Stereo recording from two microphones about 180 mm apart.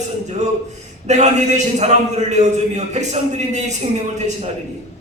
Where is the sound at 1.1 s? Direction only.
40° right (ahead or behind).